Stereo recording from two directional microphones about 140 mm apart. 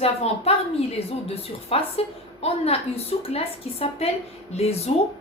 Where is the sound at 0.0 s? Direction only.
45° left (ahead or behind).